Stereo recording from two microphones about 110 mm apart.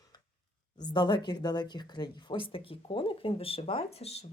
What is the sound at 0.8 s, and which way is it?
Speech, 40° left (ahead or behind).